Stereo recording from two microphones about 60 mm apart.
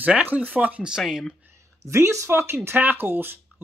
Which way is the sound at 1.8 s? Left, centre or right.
Right.